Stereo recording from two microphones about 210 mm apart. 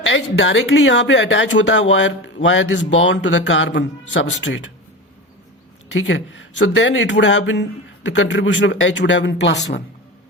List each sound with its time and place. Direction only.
0.0 s speech: 65° left (ahead or behind)
5.9 s speech: 65° left (ahead or behind)